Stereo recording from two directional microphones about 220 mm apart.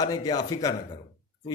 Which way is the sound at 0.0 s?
20° left (ahead or behind).